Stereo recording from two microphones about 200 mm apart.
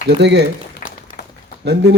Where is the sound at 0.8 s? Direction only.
40° left (ahead or behind).